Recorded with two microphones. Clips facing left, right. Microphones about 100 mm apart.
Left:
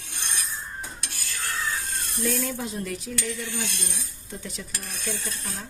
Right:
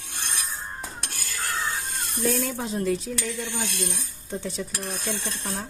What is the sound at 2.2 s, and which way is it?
Speech, 40° right (ahead or behind).